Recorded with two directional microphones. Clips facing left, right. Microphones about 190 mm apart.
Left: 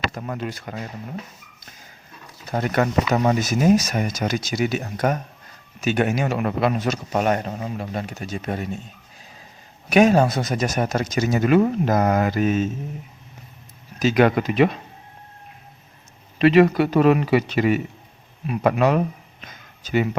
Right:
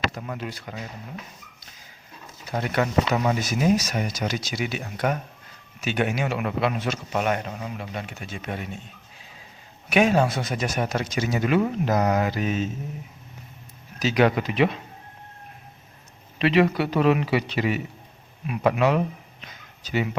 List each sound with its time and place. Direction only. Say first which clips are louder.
0.1 s speech: left 4 dB; 45° left (ahead or behind)
2.5 s speech: left 3 dB; 45° left (ahead or behind)
9.9 s speech: left 4 dB; 40° left (ahead or behind)
14.0 s speech: left 3 dB; 50° left (ahead or behind)
16.4 s speech: left 5 dB; 45° left (ahead or behind)